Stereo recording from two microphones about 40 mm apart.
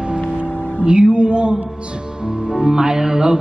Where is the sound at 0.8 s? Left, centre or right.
Right.